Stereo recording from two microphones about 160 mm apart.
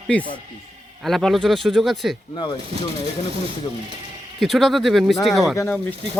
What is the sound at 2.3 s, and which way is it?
Speech, 30° left (ahead or behind).